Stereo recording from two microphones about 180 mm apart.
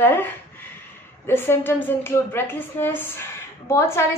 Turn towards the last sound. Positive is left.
turn(degrees=15)  # may be behind; listen again after turning